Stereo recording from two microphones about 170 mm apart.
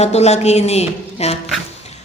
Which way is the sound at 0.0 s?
40° left (ahead or behind).